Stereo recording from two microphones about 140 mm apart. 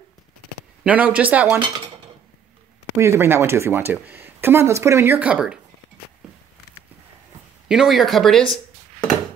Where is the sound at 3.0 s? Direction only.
15° right (ahead or behind).